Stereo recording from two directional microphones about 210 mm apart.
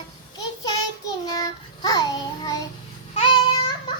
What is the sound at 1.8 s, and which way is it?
Child singing, 20° left (ahead or behind).